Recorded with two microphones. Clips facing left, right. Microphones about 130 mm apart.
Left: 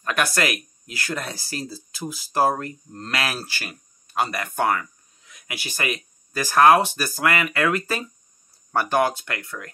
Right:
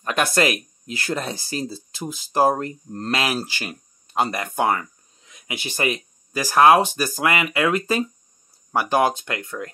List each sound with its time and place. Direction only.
0.0 s speech: 25° right (ahead or behind)